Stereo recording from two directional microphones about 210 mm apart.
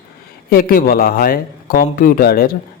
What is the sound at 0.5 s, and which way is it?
A man's voice, 45° left (ahead or behind).